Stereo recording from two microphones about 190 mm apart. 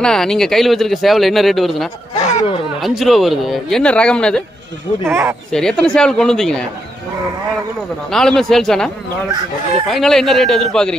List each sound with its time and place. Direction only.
0.0 s speech: 5° left (ahead or behind)
2.1 s speech: 35° left (ahead or behind)
2.8 s speech: centre (ahead or behind)
5.0 s speech: 15° right (ahead or behind)
5.5 s speech: 5° left (ahead or behind)
8.1 s speech: centre (ahead or behind)